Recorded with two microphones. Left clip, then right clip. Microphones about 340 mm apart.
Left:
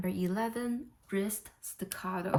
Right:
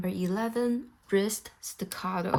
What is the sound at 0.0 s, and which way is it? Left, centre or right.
A woman's voice, centre.